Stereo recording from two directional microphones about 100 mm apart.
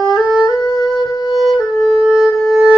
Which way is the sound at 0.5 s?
40° left (ahead or behind).